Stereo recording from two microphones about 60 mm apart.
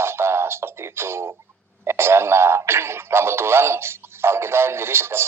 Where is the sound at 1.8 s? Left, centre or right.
Right.